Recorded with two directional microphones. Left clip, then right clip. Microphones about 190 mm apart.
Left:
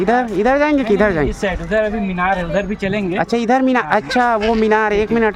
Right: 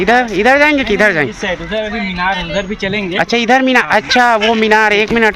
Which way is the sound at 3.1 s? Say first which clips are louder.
Right 5 dB; 5° left (ahead or behind).